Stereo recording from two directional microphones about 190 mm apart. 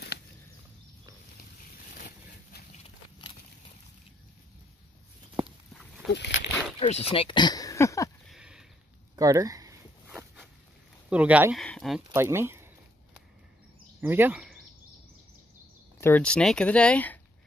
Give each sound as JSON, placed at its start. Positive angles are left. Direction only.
{"t": 2.7, "sound": "a sound", "side_deg": 30}
{"t": 6.1, "sound": "speech", "side_deg": 65}
{"t": 6.8, "sound": "speech", "side_deg": 30}
{"t": 8.3, "sound": "a sound", "side_deg": -5}
{"t": 9.1, "sound": "zipper", "side_deg": -15}
{"t": 11.1, "sound": "speech", "side_deg": -5}
{"t": 12.1, "sound": "speech", "side_deg": -15}
{"t": 14.0, "sound": "speech", "side_deg": -10}
{"t": 16.0, "sound": "speech", "side_deg": 10}